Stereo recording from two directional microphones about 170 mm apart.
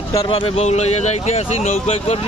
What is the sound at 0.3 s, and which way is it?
Speech, 35° left (ahead or behind).